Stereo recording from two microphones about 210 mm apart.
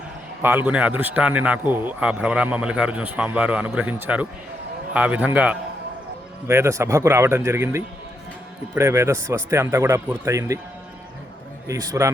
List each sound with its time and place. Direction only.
0.4 s a man's voice: 10° right (ahead or behind)
11.7 s a man's voice: 15° right (ahead or behind)